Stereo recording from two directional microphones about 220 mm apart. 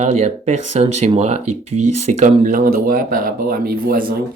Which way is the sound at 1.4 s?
90° right.